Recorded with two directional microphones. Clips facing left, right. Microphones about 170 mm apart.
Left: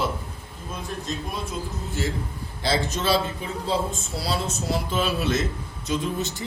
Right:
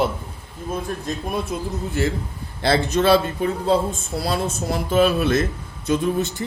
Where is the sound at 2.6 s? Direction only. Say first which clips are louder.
Right 7 dB; 60° right (ahead or behind).